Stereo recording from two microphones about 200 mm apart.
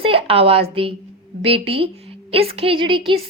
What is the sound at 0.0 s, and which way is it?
A woman's voice, 30° right (ahead or behind).